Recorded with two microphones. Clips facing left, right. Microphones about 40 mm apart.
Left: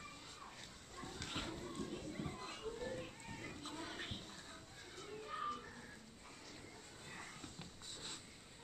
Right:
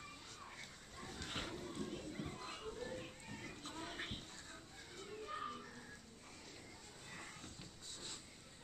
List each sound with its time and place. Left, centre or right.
0.9 s children playing: centre
3.9 s music: centre
7.1 s a sound: centre
7.5 s dog: left